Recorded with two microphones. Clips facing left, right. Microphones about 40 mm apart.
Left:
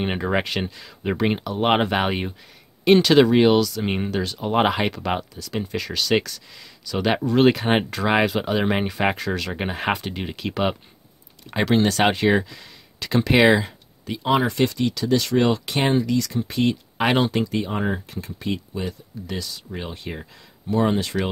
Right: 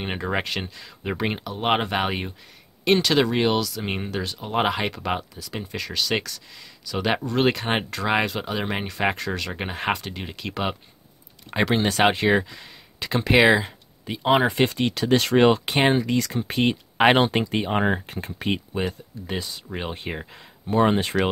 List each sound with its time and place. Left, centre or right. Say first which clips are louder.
0.0 s speech: left 3 dB; centre
14.0 s speech: right 1 dB; centre
16.0 s speech: left 1 dB; right
19.2 s speech: right 1 dB; right